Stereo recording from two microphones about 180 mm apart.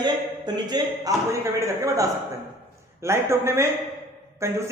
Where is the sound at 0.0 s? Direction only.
25° right (ahead or behind).